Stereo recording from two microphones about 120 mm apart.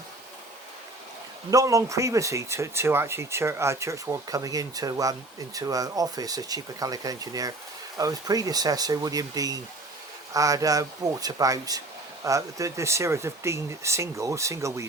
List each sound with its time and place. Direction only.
1.5 s speech: 30° right (ahead or behind)